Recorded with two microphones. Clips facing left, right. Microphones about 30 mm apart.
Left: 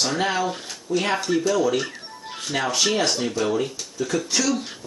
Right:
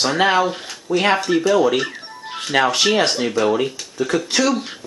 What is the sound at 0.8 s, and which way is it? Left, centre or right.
Speech, right.